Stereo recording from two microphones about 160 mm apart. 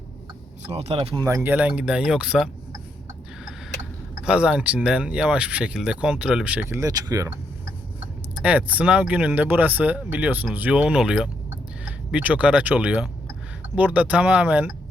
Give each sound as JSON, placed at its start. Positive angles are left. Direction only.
{"t": 0.7, "sound": "speech", "side_deg": -40}
{"t": 1.2, "sound": "speech", "side_deg": -15}
{"t": 4.3, "sound": "speech", "side_deg": -5}
{"t": 8.4, "sound": "speech", "side_deg": -10}